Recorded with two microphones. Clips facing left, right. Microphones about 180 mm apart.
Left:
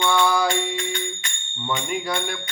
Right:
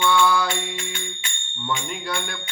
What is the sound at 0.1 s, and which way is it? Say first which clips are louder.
Music: even; 10° left (ahead or behind).